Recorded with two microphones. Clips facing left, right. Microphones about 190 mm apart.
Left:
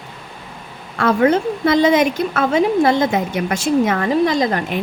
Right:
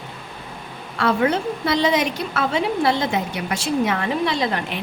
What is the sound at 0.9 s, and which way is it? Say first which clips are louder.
A woman's voice: left 5 dB; 50° left (ahead or behind).